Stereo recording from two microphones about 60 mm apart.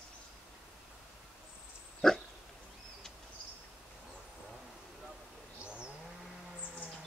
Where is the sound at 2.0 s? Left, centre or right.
Centre.